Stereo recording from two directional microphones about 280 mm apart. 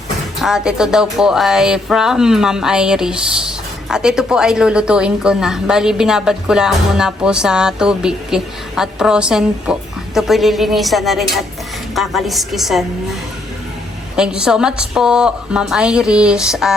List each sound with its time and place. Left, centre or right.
0.4 s speech: centre
14.2 s speech: centre